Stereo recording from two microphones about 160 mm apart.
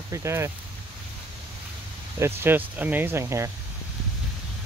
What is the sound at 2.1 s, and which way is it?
Speech, 15° right (ahead or behind).